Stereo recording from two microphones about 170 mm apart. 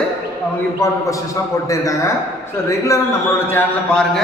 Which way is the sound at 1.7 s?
20° left (ahead or behind).